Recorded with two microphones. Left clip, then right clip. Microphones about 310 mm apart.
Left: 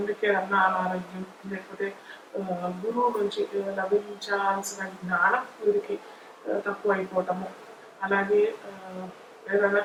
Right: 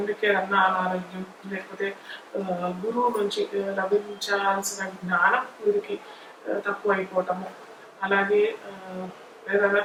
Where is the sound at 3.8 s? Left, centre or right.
Centre.